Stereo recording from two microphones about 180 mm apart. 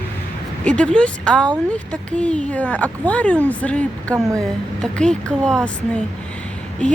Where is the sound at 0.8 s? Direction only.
5° left (ahead or behind).